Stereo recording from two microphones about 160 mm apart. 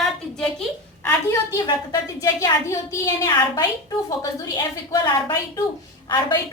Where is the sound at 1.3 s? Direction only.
20° left (ahead or behind).